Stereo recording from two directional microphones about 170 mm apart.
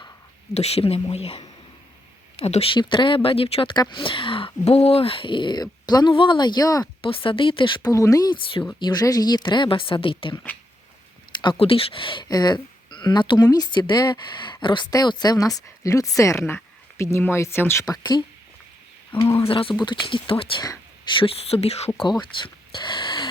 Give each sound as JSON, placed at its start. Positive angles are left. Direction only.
{"t": 0.5, "sound": "speech", "side_deg": 40}
{"t": 7.1, "sound": "speech", "side_deg": 30}
{"t": 11.4, "sound": "speech", "side_deg": 35}
{"t": 19.5, "sound": "speech", "side_deg": 30}
{"t": 22.2, "sound": "a sound", "side_deg": 30}